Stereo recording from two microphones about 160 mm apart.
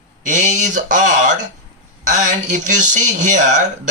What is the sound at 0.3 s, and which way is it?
Speech, 50° right (ahead or behind).